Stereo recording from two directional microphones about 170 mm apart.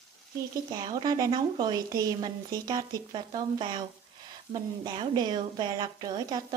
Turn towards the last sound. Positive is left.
turn(degrees=-25)  # may be behind; listen again after turning